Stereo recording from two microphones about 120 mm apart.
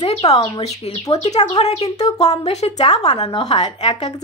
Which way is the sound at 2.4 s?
65° left (ahead or behind).